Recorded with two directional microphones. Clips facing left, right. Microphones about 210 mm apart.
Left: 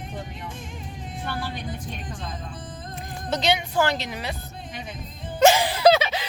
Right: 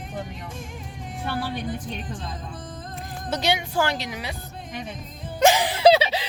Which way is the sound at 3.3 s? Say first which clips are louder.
Left 1 dB; 10° right (ahead or behind).